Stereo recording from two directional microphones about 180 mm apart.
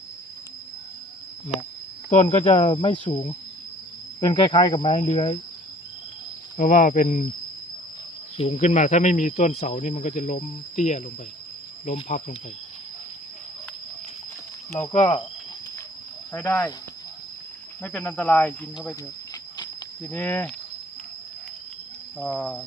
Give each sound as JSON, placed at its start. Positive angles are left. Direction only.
{"t": 2.0, "sound": "speech", "side_deg": 40}
{"t": 6.6, "sound": "speech", "side_deg": 50}
{"t": 8.4, "sound": "speech", "side_deg": 35}
{"t": 14.8, "sound": "speech", "side_deg": 35}
{"t": 16.3, "sound": "speech", "side_deg": 15}
{"t": 17.8, "sound": "speech", "side_deg": 10}
{"t": 20.1, "sound": "speech", "side_deg": 10}
{"t": 22.2, "sound": "speech", "side_deg": 5}